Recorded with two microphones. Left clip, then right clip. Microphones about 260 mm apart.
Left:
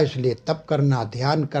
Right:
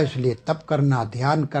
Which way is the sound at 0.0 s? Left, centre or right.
Right.